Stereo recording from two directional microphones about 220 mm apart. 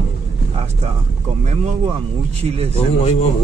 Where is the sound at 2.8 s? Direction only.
25° left (ahead or behind).